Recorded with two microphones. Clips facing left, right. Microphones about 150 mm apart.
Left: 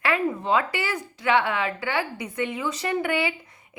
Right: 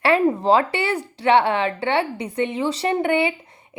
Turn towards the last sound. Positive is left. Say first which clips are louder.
# right 5 dB
turn(degrees=-25)  # may be behind; listen again after turning